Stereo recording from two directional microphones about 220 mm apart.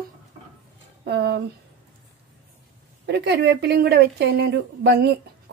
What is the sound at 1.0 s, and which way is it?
Speech, 50° right (ahead or behind).